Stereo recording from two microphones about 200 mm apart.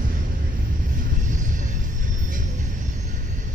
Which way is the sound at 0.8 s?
40° right (ahead or behind).